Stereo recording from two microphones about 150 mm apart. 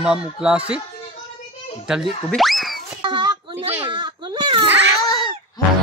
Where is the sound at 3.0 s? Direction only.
30° right (ahead or behind).